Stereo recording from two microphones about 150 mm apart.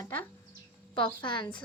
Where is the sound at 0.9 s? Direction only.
30° left (ahead or behind).